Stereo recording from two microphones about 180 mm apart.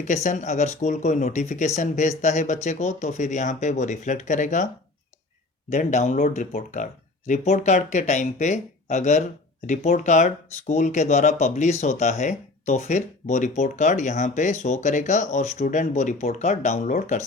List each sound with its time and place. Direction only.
0.0 s speech: 40° left (ahead or behind)